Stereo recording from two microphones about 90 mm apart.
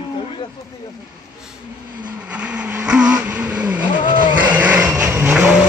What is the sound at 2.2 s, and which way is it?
Vehicle, 15° right (ahead or behind).